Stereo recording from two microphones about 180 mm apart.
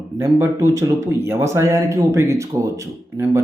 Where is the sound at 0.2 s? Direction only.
15° right (ahead or behind).